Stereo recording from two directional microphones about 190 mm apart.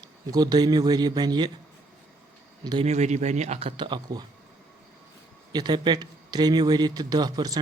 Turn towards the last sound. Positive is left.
turn(degrees=-20)  # may be behind; listen again after turning